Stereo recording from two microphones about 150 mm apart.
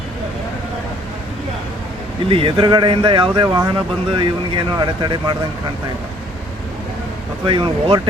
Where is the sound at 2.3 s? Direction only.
35° right (ahead or behind).